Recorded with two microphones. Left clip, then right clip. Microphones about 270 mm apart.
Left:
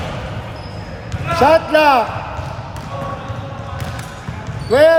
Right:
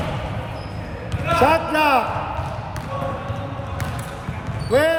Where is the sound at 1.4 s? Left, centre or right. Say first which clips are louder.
Left 6 dB; left.